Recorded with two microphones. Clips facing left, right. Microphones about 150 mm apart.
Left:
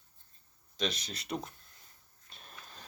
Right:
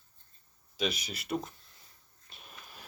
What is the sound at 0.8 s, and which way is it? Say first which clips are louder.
Speech: right 2 dB; 5° right (ahead or behind).